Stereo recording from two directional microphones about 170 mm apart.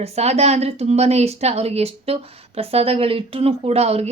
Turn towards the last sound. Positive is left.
turn(degrees=-35)  # may be behind; listen again after turning